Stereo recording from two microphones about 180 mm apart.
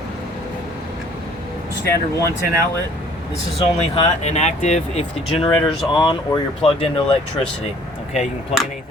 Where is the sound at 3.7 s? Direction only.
35° left (ahead or behind).